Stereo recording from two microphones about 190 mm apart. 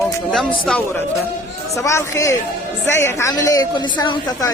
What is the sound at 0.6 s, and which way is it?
A woman's voice, 5° left (ahead or behind).